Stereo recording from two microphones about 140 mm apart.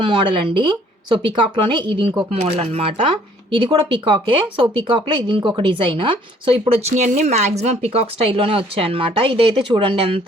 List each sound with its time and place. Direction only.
0.0 s speech: 35° right (ahead or behind)
2.3 s speech: 45° right (ahead or behind)
3.5 s speech: 35° right (ahead or behind)
6.9 s speech: 55° right (ahead or behind); by 10.2 s 40° right (ahead or behind)